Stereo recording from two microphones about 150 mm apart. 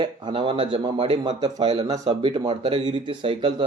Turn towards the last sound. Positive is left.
turn(degrees=-35)  # may be behind; listen again after turning